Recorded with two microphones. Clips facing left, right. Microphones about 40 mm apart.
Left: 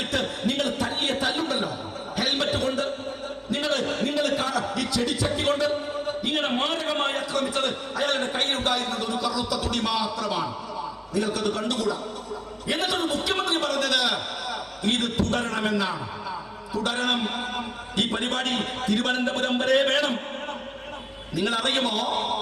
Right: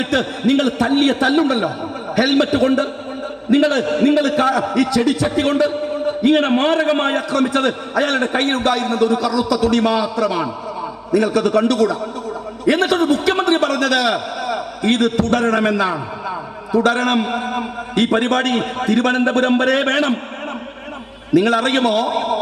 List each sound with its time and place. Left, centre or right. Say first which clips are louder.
0.0 s a man's voice: right 9 dB; right
21.3 s a man's voice: right 10 dB; right